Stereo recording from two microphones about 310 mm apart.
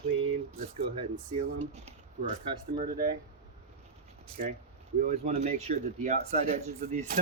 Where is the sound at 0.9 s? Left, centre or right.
Right.